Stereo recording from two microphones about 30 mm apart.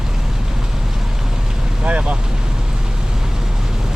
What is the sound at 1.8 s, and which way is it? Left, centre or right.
Speech, right.